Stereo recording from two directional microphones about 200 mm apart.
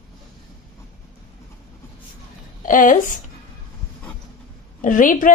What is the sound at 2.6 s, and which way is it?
Speech, 40° left (ahead or behind).